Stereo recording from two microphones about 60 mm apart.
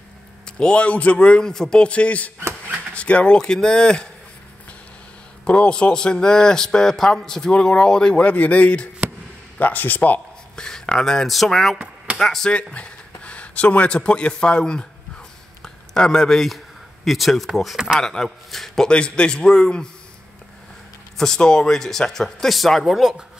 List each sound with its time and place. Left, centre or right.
0.5 s a man's voice: centre
5.4 s a man's voice: centre
10.5 s speech: centre
11.7 s a sound: centre
12.2 s speech: centre
12.7 s speech: left
15.6 s a sound: centre
17.7 s speech: centre
18.0 s a man's voice: centre
18.9 s a man's voice: centre
21.2 s a man's voice: centre